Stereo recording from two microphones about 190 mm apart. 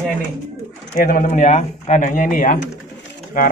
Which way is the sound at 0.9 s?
45° left (ahead or behind).